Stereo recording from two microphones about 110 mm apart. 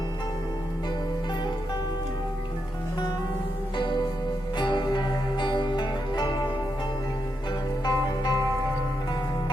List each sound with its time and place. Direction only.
4.5 s music: 45° left (ahead or behind)
7.9 s music: 40° left (ahead or behind)